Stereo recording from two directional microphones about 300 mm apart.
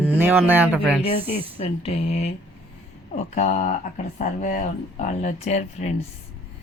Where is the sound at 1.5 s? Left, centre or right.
Centre.